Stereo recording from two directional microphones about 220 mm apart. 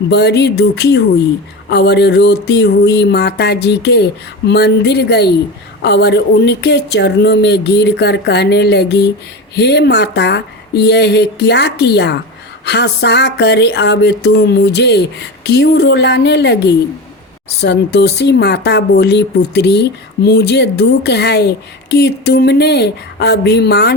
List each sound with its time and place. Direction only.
0.1 s speech: 50° left (ahead or behind)